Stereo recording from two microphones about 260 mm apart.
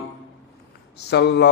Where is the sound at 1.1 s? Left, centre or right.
Left.